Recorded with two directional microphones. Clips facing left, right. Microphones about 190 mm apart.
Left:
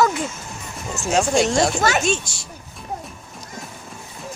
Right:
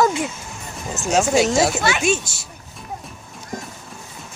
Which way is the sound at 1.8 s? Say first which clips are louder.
Left 2 dB; 45° left (ahead or behind).